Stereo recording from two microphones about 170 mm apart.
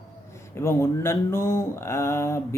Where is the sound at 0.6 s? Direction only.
15° left (ahead or behind).